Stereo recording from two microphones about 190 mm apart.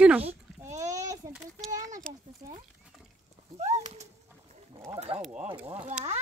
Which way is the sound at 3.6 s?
40° right (ahead or behind).